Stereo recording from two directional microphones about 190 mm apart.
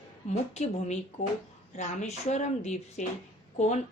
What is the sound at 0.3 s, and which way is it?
A woman's voice, 35° left (ahead or behind).